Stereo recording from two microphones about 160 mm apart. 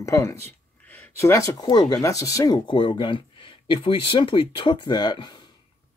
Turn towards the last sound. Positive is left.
turn(degrees=25)  # may be behind; listen again after turning